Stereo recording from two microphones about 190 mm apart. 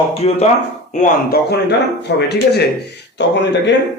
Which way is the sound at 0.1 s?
30° left (ahead or behind).